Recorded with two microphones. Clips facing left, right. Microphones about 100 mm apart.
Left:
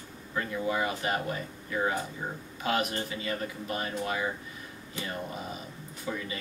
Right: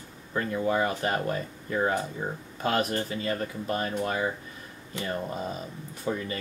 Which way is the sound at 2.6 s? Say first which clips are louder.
Right 3 dB; 40° right (ahead or behind).